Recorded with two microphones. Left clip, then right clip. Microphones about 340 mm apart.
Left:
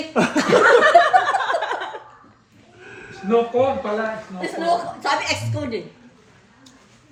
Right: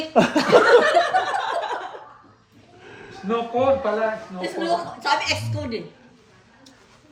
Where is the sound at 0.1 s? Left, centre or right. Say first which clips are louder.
Right 2 dB; right.